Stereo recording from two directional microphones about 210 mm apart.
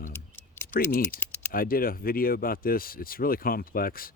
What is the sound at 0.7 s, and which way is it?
Speech, 45° left (ahead or behind).